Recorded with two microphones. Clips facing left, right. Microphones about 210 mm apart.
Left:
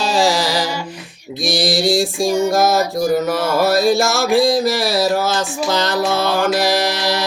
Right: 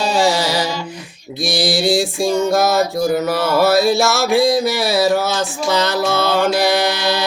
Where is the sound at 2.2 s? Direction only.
15° left (ahead or behind).